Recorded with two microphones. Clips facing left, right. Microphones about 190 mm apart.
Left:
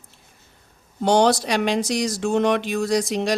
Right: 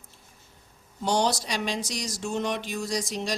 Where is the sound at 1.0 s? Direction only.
65° left (ahead or behind).